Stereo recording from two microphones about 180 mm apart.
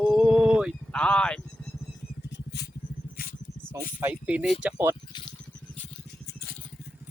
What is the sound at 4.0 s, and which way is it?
Speech, 10° right (ahead or behind).